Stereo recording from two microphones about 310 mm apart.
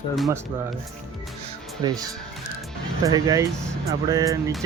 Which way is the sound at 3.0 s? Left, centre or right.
Centre.